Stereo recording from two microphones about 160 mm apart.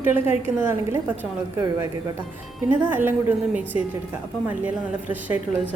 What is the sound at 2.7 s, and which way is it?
A woman's voice, 10° right (ahead or behind).